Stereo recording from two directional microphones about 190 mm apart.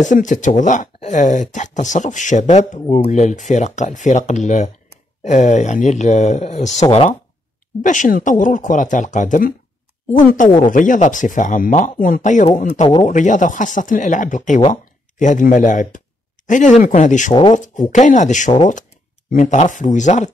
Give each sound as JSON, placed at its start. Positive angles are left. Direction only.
{"t": 0.0, "sound": "speech", "side_deg": 40}
{"t": 10.6, "sound": "speech", "side_deg": 45}
{"t": 17.3, "sound": "speech", "side_deg": 25}
{"t": 17.6, "sound": "speech", "side_deg": 40}